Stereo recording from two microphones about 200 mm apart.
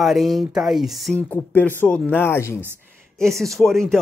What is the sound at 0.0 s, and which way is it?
Speech, centre (ahead or behind).